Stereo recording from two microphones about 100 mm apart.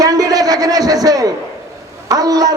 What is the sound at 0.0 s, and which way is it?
A man's voice, 40° right (ahead or behind).